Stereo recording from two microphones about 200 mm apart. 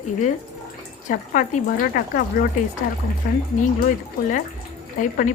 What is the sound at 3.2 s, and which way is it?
Speech, 40° left (ahead or behind).